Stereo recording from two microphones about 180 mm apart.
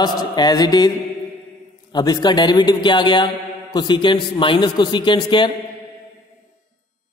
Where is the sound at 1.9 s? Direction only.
25° left (ahead or behind).